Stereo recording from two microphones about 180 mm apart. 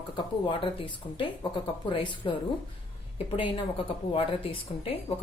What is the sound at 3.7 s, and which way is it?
Speech, 30° left (ahead or behind).